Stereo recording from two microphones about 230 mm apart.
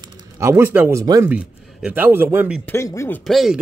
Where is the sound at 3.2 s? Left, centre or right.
Centre.